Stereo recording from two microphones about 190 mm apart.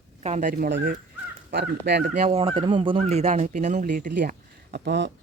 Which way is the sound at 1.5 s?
60° right (ahead or behind).